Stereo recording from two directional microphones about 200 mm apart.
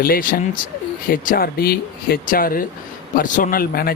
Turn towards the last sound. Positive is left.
turn(degrees=50)  # may be behind; listen again after turning